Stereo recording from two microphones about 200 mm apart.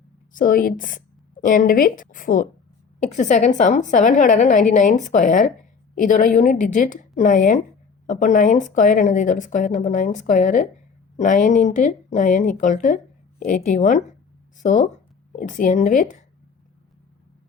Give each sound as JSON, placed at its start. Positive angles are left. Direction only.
{"t": 0.3, "sound": "a woman's voice", "side_deg": 45}